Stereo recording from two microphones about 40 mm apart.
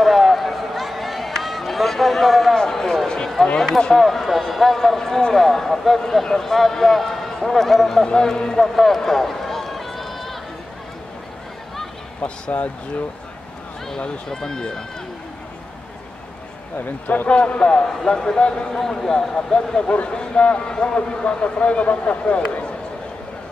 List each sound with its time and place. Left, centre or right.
0.0 s run: centre
2.5 s a sound: centre
3.4 s speech: centre
3.9 s speech: centre
8.0 s speech: centre
8.5 s run: centre
12.2 s speech: left
13.9 s speech: centre
17.3 s speech: left
18.8 s speech: centre; by 22.7 s left